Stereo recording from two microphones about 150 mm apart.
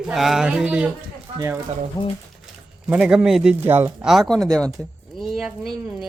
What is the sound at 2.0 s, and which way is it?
Speech, 25° left (ahead or behind).